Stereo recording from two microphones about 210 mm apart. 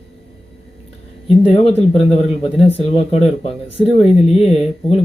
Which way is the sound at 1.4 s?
25° left (ahead or behind).